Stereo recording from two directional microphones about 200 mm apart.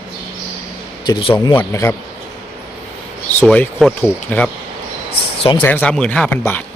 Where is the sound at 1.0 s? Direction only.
25° left (ahead or behind).